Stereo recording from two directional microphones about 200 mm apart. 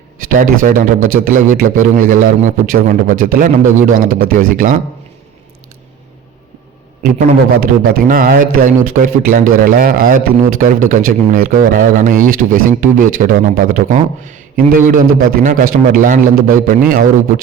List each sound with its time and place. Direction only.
0.3 s a man's voice: 40° right (ahead or behind)
7.0 s a man's voice: 45° right (ahead or behind)